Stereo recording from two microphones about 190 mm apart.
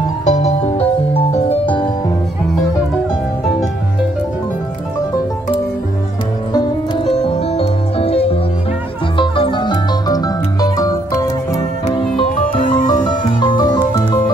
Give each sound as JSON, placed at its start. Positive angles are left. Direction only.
{"t": 0.2, "sound": "music", "side_deg": 35}
{"t": 7.1, "sound": "music", "side_deg": 30}
{"t": 12.5, "sound": "music", "side_deg": 45}
{"t": 13.0, "sound": "music", "side_deg": 25}